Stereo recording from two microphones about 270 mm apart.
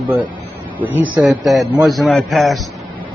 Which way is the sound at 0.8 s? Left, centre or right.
Centre.